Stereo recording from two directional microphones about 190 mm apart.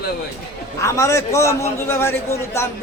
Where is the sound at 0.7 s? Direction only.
15° left (ahead or behind).